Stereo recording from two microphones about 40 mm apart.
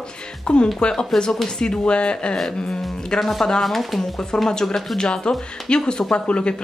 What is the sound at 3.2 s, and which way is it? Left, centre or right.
Speech, centre.